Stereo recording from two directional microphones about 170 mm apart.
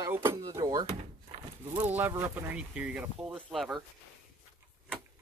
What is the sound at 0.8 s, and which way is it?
Door, 35° right (ahead or behind).